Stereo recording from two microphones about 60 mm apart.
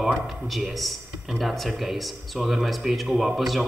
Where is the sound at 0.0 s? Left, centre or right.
Centre.